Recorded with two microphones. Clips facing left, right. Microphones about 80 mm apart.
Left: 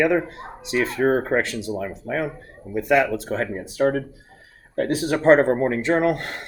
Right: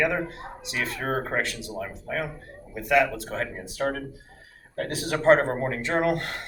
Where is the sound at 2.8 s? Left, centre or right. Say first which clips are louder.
Left 3 dB; left.